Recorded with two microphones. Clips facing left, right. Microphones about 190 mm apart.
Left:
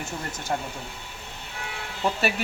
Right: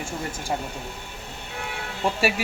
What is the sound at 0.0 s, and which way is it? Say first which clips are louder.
Speech: right 2 dB; 10° right (ahead or behind).